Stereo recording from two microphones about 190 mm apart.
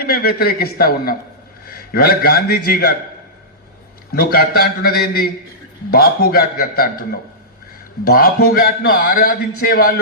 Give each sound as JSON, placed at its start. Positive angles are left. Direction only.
{"t": 0.0, "sound": "a man's voice", "side_deg": 50}
{"t": 4.1, "sound": "a man's voice", "side_deg": 55}